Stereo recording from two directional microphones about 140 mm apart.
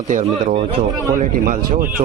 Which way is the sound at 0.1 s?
70° right (ahead or behind).